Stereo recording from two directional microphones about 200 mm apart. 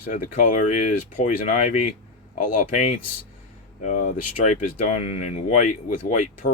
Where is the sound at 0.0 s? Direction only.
45° left (ahead or behind).